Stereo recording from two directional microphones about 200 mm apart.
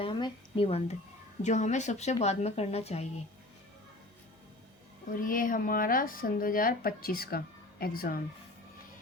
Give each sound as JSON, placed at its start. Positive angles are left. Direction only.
{"t": 0.0, "sound": "a woman's voice", "side_deg": 25}
{"t": 5.2, "sound": "speech", "side_deg": 45}